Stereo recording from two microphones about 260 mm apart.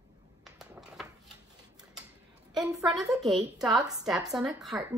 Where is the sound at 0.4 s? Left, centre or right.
Centre.